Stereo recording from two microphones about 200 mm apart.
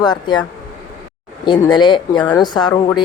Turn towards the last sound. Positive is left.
turn(degrees=20)  # may be behind; listen again after turning